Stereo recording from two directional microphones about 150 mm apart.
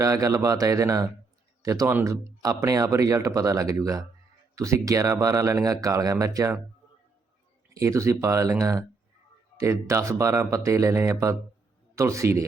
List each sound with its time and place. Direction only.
0.0 s speech: 20° right (ahead or behind)
7.7 s speech: 20° right (ahead or behind)